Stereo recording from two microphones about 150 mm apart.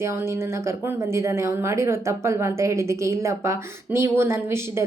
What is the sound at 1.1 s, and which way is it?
A woman's voice, 20° right (ahead or behind).